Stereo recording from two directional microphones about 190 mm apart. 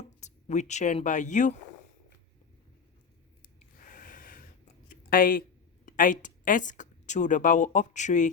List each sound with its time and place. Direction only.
0.0 s speech: 35° left (ahead or behind)
3.6 s snort: 45° left (ahead or behind)
4.9 s a sound: 50° left (ahead or behind)
5.8 s a woman's voice: 45° left (ahead or behind)